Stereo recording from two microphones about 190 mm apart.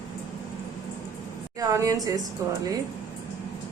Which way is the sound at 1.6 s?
15° right (ahead or behind).